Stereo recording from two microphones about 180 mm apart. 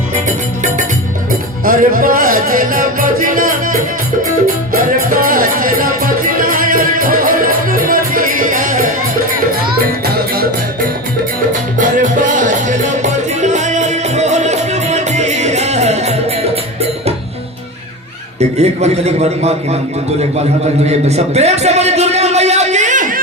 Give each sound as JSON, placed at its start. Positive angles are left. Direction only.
{"t": 0.3, "sound": "music", "side_deg": -45}
{"t": 10.0, "sound": "music", "side_deg": -60}
{"t": 11.8, "sound": "music", "side_deg": -45}
{"t": 18.3, "sound": "a man's voice", "side_deg": -35}
{"t": 21.1, "sound": "a sound", "side_deg": -35}